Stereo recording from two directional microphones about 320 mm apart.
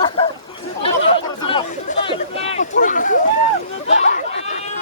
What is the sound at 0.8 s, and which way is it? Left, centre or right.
Chatter, centre.